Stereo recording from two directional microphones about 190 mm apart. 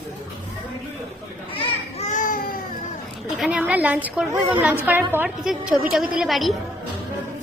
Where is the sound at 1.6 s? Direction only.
40° left (ahead or behind).